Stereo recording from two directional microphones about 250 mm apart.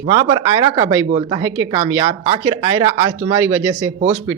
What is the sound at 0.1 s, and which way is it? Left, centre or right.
Speech, centre.